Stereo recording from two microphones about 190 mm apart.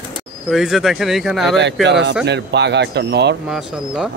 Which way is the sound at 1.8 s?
65° right (ahead or behind).